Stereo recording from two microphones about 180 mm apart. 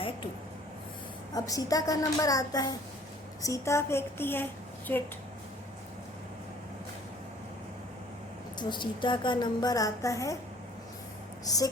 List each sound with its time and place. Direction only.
1.3 s a woman's voice: 20° left (ahead or behind)
8.5 s a woman's voice: 25° left (ahead or behind)
11.4 s a woman's voice: 20° left (ahead or behind)